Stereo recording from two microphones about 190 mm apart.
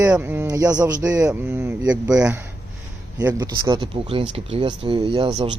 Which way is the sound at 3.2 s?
20° right (ahead or behind).